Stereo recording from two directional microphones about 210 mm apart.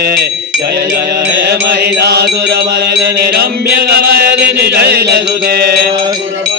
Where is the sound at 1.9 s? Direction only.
50° right (ahead or behind).